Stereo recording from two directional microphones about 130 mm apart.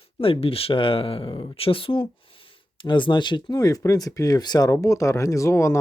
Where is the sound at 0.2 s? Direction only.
45° left (ahead or behind).